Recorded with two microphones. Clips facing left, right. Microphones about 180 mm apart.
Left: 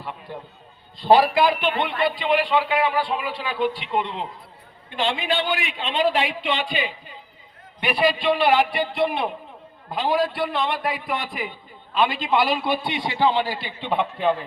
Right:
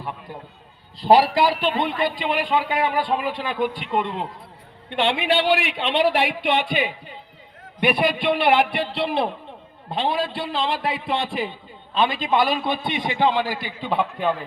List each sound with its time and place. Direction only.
1.1 s a man's voice: 35° right (ahead or behind); by 4.3 s 50° right (ahead or behind)
4.9 s a man's voice: 65° right (ahead or behind)
8.9 s a man's voice: 35° right (ahead or behind)